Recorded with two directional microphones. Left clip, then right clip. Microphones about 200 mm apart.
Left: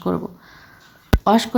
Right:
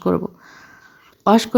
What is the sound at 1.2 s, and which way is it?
Speech, 25° right (ahead or behind).